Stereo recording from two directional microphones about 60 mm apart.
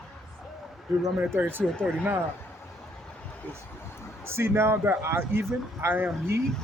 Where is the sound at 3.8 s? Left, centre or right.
Left.